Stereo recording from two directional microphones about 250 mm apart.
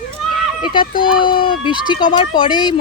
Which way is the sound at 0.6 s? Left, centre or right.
Centre.